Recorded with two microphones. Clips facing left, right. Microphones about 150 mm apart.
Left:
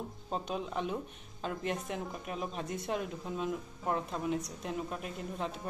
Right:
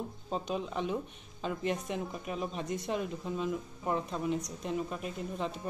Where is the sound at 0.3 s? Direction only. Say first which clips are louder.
Right 1 dB; centre (ahead or behind).